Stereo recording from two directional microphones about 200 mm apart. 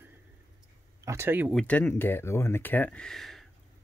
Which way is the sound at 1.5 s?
5° left (ahead or behind).